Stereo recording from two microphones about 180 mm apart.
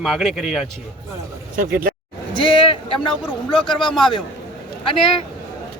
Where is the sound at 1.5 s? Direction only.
55° right (ahead or behind).